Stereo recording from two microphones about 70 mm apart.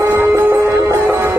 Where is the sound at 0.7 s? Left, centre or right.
Right.